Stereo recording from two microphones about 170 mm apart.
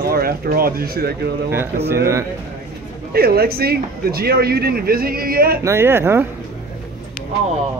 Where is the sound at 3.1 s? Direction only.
65° right (ahead or behind).